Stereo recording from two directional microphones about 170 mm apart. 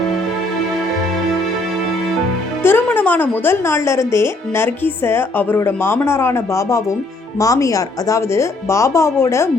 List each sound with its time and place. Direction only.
2.6 s speech: 10° left (ahead or behind)